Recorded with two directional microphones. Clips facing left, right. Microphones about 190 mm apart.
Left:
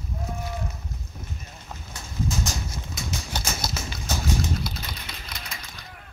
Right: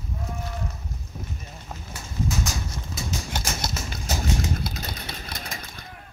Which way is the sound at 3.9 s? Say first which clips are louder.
Even; 45° right (ahead or behind).